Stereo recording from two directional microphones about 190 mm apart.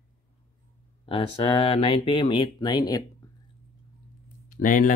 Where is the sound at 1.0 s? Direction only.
30° left (ahead or behind).